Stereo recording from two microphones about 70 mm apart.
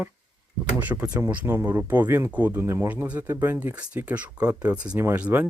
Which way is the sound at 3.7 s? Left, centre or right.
Right.